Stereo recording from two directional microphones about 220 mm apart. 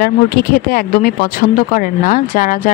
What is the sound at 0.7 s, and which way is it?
Speech, 40° left (ahead or behind).